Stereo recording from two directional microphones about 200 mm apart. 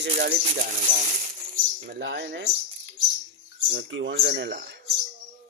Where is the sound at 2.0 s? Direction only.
60° right (ahead or behind).